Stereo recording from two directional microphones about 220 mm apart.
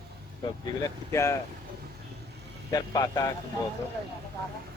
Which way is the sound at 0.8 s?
15° left (ahead or behind).